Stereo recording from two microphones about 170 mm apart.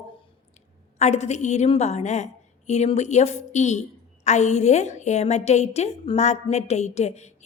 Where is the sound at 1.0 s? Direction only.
40° left (ahead or behind).